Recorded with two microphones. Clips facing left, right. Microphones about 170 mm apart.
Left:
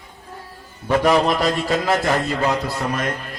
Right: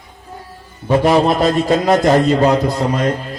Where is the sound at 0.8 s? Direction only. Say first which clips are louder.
Right 4 dB; 25° right (ahead or behind).